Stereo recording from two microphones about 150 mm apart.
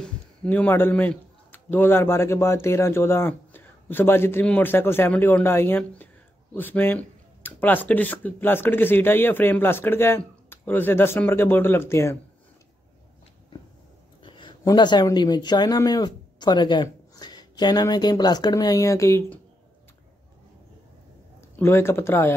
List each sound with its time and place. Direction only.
0.0 s a man's voice: 10° left (ahead or behind)
14.2 s speech: 35° left (ahead or behind)
21.4 s speech: 15° left (ahead or behind)